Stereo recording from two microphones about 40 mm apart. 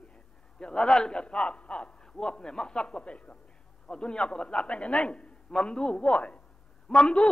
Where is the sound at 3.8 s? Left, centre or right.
Left.